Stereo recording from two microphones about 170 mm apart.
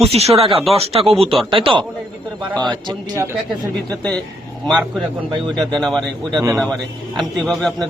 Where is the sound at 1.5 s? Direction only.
30° right (ahead or behind).